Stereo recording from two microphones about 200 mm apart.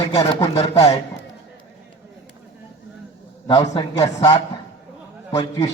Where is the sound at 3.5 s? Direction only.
20° left (ahead or behind).